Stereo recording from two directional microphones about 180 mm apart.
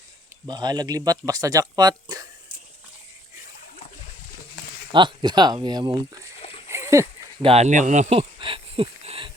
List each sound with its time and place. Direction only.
0.4 s speech: 25° right (ahead or behind)
4.9 s speech: 25° right (ahead or behind)
6.7 s splash: 15° right (ahead or behind)
7.4 s speech: 35° right (ahead or behind)